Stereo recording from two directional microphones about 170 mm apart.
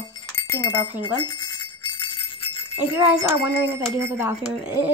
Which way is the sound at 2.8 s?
15° right (ahead or behind).